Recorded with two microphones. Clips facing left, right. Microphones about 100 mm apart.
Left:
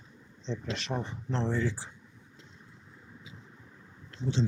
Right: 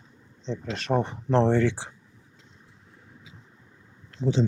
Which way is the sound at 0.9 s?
65° right (ahead or behind).